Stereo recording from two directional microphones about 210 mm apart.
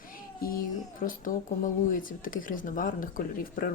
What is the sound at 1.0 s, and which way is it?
Speech, 40° left (ahead or behind).